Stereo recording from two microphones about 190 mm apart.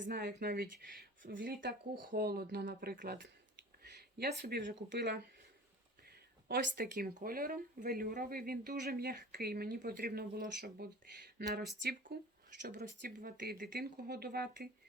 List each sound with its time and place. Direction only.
0.0 s speech: 65° right (ahead or behind)
4.2 s speech: 55° right (ahead or behind)
6.5 s speech: 55° right (ahead or behind)